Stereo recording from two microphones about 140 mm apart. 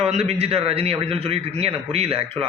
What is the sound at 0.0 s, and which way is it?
A man's voice, 50° right (ahead or behind).